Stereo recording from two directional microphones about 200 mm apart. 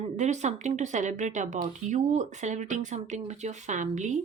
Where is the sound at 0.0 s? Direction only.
35° right (ahead or behind).